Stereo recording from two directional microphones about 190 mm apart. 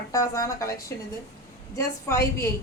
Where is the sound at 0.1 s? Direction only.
15° left (ahead or behind).